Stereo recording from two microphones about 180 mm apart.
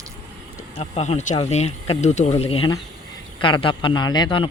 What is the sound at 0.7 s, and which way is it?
A man's voice, 35° left (ahead or behind).